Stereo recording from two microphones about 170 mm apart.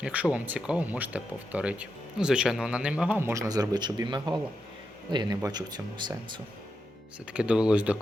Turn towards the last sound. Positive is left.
turn(degrees=-10)  # may be behind; listen again after turning